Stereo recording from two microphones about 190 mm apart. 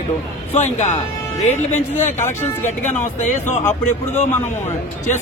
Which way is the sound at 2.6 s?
10° left (ahead or behind).